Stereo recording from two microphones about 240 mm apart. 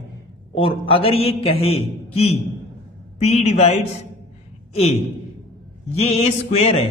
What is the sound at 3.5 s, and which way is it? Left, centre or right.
A woman's voice, left.